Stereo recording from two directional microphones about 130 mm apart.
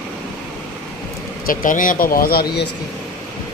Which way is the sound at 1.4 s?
90° left.